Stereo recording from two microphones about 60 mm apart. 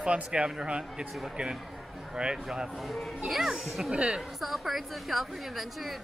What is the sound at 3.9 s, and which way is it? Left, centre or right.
Speech, centre.